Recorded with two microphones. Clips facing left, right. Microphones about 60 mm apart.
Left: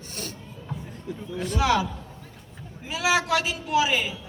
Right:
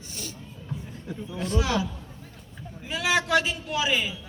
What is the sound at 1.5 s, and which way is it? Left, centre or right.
Speech, left.